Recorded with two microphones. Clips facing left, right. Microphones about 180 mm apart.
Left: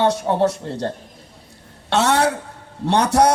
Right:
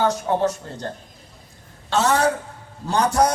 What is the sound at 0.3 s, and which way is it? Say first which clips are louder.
Speech: left 3 dB; 35° left (ahead or behind).